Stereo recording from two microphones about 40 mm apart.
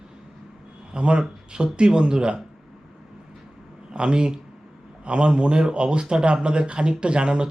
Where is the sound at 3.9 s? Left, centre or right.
Right.